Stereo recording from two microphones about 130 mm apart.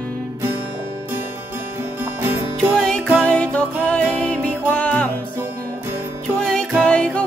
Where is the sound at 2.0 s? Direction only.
15° right (ahead or behind).